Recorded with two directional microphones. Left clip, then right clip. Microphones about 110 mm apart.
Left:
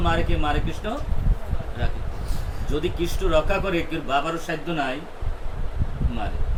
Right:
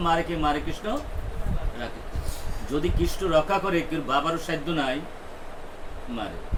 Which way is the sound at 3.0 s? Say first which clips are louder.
Even; centre (ahead or behind).